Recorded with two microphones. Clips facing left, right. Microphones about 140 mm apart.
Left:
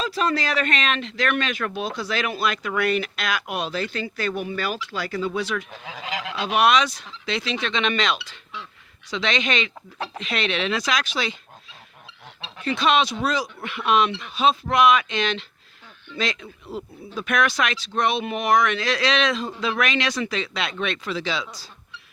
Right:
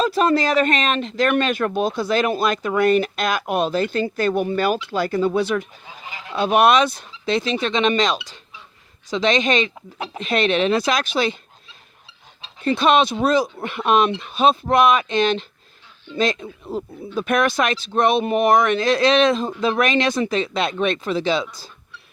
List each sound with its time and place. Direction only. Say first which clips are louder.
0.0 s speech: right 6 dB; 50° right (ahead or behind)
5.7 s speech: left 6 dB; 90° left
6.4 s speech: right 4 dB; 50° right (ahead or behind)
12.6 s speech: right 4 dB; 50° right (ahead or behind)